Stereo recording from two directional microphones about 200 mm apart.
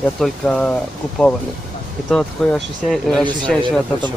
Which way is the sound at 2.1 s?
5° left (ahead or behind).